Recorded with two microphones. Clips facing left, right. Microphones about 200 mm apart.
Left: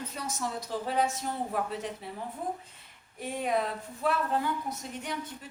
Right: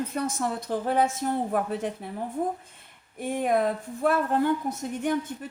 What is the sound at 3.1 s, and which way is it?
A woman's voice, 50° right (ahead or behind).